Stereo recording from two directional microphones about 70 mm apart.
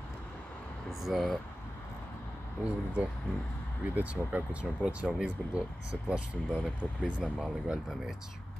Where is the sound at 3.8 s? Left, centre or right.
Right.